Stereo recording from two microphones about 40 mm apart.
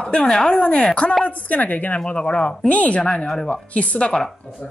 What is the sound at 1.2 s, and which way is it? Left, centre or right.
Speech, left.